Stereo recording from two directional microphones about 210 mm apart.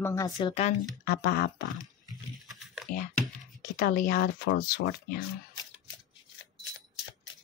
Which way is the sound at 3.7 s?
40° left (ahead or behind).